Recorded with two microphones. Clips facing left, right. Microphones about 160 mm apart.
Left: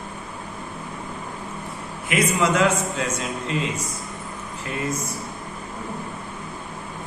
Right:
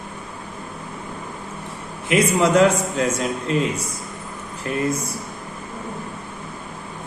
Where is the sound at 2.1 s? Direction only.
35° right (ahead or behind).